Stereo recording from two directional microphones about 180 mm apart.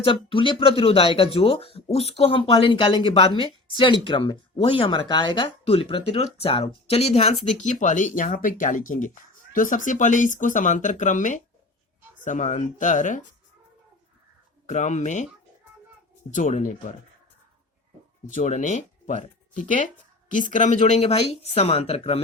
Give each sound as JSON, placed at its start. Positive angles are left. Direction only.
{"t": 0.0, "sound": "speech", "side_deg": 30}
{"t": 14.7, "sound": "speech", "side_deg": 40}
{"t": 16.3, "sound": "speech", "side_deg": 45}
{"t": 18.3, "sound": "speech", "side_deg": 45}